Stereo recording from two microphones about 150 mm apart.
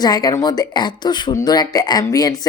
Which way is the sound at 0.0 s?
25° left (ahead or behind).